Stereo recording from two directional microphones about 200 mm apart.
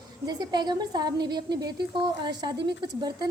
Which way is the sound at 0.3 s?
20° right (ahead or behind).